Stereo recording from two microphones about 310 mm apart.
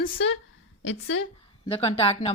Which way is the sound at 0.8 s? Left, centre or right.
Left.